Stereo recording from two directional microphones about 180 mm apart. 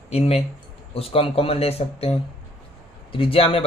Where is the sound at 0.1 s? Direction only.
35° left (ahead or behind).